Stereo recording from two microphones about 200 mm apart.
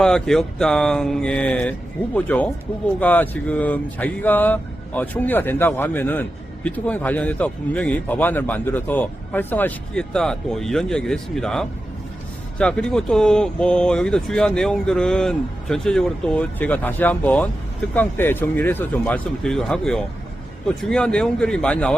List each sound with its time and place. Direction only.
0.0 s speech: 5° left (ahead or behind)